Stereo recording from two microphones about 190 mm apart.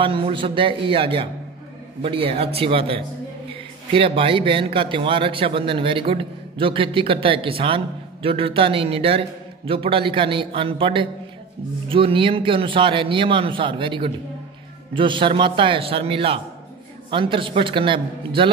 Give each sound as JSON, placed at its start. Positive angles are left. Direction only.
{"t": 0.0, "sound": "a man's voice", "side_deg": -25}